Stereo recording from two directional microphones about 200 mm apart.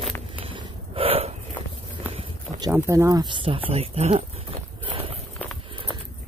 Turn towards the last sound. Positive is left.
turn(degrees=-30)  # may be behind; listen again after turning